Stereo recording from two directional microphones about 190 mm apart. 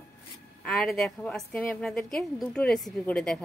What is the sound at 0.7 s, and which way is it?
A woman's voice, centre (ahead or behind).